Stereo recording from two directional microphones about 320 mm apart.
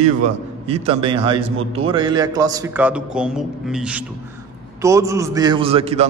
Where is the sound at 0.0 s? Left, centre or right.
Centre.